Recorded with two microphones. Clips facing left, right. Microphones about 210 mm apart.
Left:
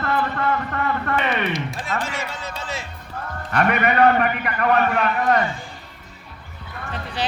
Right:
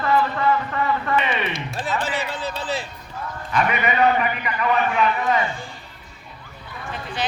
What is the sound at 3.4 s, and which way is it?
A man's voice, 55° left (ahead or behind).